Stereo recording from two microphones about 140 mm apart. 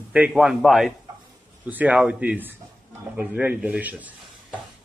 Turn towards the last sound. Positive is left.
turn(degrees=-10)  # may be behind; listen again after turning